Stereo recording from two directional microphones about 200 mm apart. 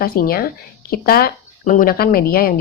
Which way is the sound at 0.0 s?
50° left (ahead or behind).